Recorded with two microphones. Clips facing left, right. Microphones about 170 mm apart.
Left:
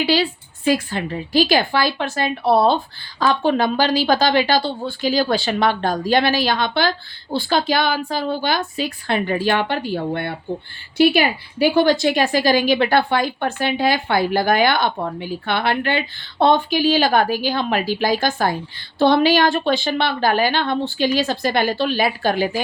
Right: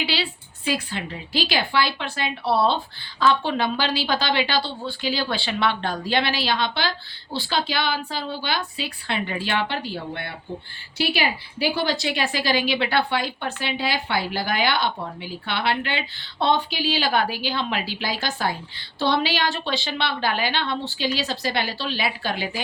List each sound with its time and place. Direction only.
0.0 s a woman's voice: 45° left (ahead or behind)